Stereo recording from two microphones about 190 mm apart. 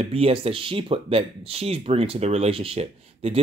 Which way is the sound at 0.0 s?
30° right (ahead or behind).